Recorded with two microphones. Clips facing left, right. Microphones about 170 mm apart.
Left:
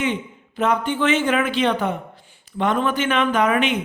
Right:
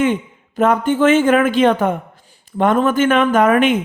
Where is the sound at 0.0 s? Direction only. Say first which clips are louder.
Right 7 dB; 50° right (ahead or behind).